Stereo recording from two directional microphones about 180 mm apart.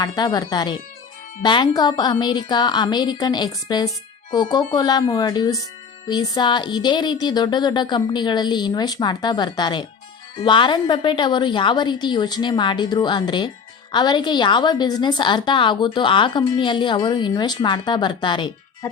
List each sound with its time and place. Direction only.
0.0 s a woman's voice: 20° left (ahead or behind)